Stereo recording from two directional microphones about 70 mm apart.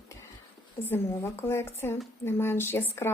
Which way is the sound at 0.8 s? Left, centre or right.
Left.